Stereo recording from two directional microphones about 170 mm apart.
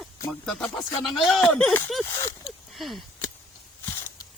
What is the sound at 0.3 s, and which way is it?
Speech, centre (ahead or behind).